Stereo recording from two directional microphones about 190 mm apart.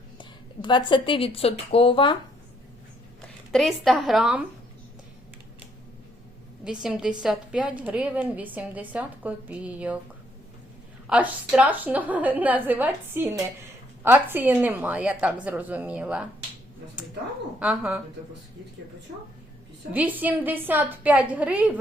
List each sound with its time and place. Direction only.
0.2 s a woman's voice: 25° left (ahead or behind)
3.2 s speech: centre (ahead or behind)
6.7 s a woman's voice: 5° right (ahead or behind)
11.0 s a woman's voice: 5° right (ahead or behind)
17.6 s a woman's voice: 5° right (ahead or behind)
19.9 s a woman's voice: 10° right (ahead or behind)